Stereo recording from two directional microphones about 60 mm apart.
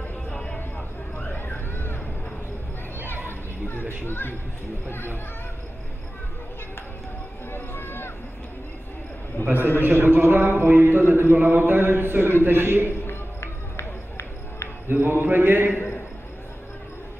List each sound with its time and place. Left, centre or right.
0.3 s vehicle: centre
1.3 s a sound: left
3.3 s a sound: left
4.0 s speech: left
7.5 s run: left
9.4 s speech: left
9.8 s a man's voice: right
13.0 s run: left
14.9 s a man's voice: right